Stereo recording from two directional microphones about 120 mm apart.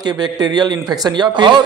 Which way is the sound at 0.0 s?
35° right (ahead or behind).